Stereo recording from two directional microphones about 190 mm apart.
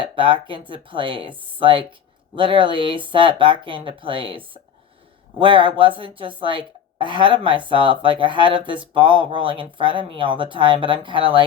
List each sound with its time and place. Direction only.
0.0 s a woman's voice: 25° right (ahead or behind)